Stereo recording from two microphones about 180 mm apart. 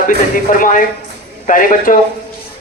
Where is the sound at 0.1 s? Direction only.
50° left (ahead or behind).